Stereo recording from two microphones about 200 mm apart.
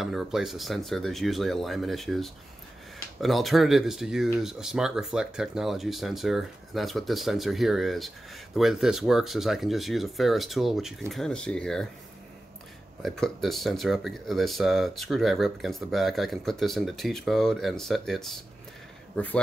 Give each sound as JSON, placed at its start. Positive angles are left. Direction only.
{"t": 0.0, "sound": "speech", "side_deg": 0}
{"t": 13.0, "sound": "speech", "side_deg": 0}